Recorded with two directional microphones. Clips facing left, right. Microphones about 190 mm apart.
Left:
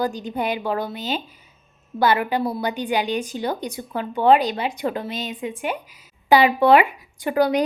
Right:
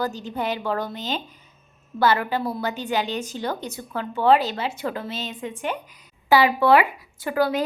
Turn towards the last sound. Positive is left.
turn(degrees=20)  # may be behind; listen again after turning